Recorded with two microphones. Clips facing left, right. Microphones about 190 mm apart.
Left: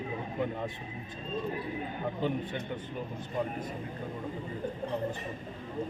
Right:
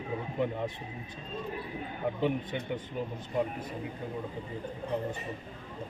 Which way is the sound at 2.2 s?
10° right (ahead or behind).